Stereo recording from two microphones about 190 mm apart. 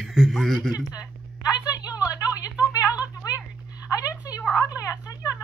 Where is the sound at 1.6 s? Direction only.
20° left (ahead or behind).